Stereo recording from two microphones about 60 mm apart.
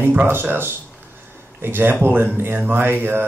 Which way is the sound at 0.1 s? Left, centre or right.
Right.